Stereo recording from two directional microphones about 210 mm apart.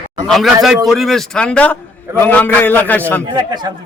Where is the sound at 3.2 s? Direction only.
20° right (ahead or behind).